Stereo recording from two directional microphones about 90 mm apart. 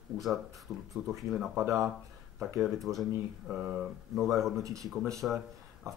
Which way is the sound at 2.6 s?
Centre (ahead or behind).